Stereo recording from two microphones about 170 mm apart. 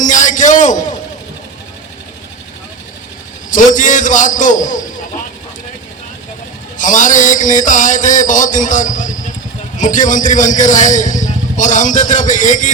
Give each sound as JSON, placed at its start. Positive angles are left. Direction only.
{"t": 0.0, "sound": "a sound", "side_deg": 50}
{"t": 3.5, "sound": "a man's voice", "side_deg": 50}
{"t": 6.7, "sound": "a man's voice", "side_deg": 50}